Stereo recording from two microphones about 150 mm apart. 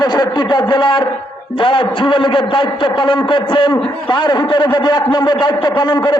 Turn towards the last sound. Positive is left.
turn(degrees=30)  # may be behind; listen again after turning